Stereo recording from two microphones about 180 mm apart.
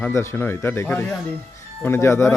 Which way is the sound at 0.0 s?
15° left (ahead or behind).